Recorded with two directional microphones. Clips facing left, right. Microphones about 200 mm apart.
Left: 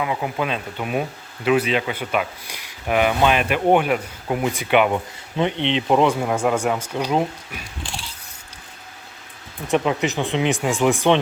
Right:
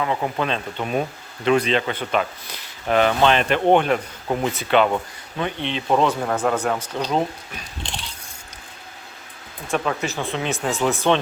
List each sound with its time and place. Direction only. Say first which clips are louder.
0.0 s speech: right 1 dB; 10° left (ahead or behind)
9.6 s speech: left 4 dB; 20° left (ahead or behind)